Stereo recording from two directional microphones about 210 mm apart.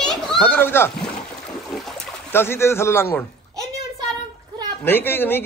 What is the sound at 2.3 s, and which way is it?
Speech, 10° left (ahead or behind).